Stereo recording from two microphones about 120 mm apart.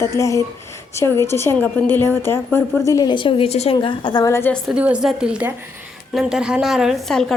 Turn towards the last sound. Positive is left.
turn(degrees=0)  # may be behind; listen again after turning